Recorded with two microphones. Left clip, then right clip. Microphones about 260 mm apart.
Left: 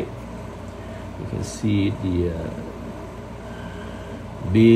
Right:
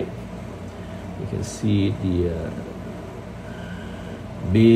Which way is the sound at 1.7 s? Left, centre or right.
Centre.